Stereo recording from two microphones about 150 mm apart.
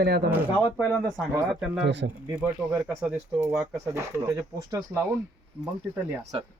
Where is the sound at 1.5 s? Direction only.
5° right (ahead or behind).